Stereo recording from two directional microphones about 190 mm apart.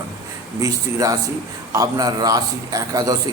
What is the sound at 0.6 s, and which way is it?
A man's voice, 20° right (ahead or behind).